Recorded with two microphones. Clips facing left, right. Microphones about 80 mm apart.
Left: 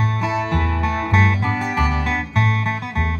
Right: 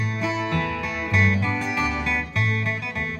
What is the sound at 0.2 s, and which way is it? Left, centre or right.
Music, left.